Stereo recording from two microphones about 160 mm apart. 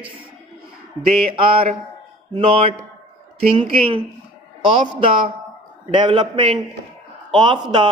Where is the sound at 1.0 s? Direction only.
35° right (ahead or behind).